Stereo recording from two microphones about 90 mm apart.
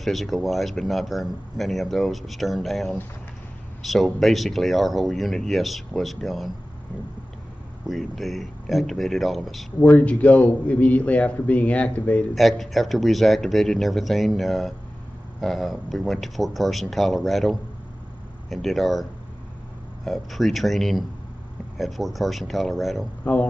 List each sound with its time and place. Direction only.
0.0 s speech: centre (ahead or behind)
7.8 s speech: centre (ahead or behind)
9.8 s a man's voice: 15° left (ahead or behind)
12.4 s speech: centre (ahead or behind)
20.1 s speech: centre (ahead or behind)
23.2 s a man's voice: 15° left (ahead or behind)